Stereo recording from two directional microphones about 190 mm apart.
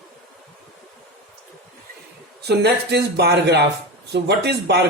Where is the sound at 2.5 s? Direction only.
60° right (ahead or behind).